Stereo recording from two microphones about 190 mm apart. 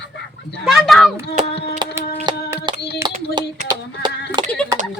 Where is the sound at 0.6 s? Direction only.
Centre (ahead or behind).